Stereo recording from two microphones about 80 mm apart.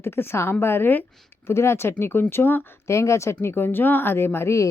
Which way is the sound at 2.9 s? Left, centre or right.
Left.